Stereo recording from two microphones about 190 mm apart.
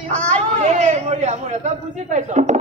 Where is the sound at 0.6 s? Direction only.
35° right (ahead or behind).